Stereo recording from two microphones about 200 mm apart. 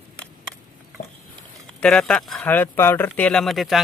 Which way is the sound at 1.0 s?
45° left (ahead or behind).